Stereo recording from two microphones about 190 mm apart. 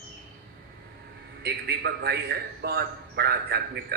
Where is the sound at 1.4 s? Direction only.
55° right (ahead or behind).